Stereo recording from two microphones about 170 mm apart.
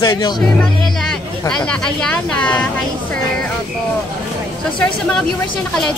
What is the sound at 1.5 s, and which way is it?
Speech, 5° left (ahead or behind).